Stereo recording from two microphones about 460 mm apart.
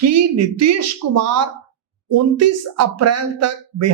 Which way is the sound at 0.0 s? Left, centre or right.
Right.